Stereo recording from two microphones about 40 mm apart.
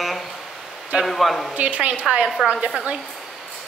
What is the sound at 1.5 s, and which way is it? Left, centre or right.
Speech, right.